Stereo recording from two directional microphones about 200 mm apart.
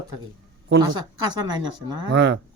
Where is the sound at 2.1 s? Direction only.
60° right (ahead or behind).